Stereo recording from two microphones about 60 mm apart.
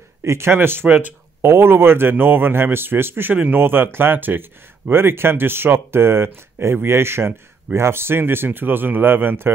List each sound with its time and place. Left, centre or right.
0.2 s speech: right
0.8 s speech: right
1.4 s a man's voice: right